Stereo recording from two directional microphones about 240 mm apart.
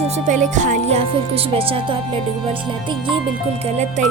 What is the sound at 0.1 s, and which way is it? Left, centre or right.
Music, right.